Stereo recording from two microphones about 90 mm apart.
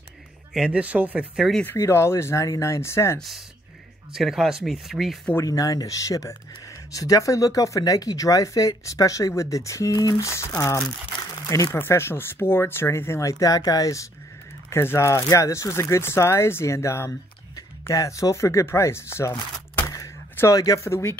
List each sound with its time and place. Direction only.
0.5 s speech: 10° right (ahead or behind)
1.8 s speech: 30° left (ahead or behind)
3.2 s speech: centre (ahead or behind)
5.4 s speech: 40° left (ahead or behind)
11.1 s a sound: 45° left (ahead or behind)
11.8 s speech: 25° left (ahead or behind)
14.7 s speech: 30° left (ahead or behind)